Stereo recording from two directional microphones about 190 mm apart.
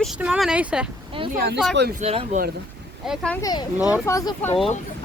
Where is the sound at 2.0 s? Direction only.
35° right (ahead or behind).